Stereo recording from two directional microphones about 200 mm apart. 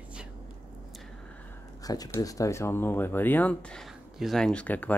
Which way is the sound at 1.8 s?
20° left (ahead or behind).